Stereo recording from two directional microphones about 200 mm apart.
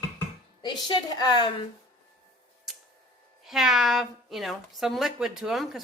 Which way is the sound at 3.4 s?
Centre (ahead or behind).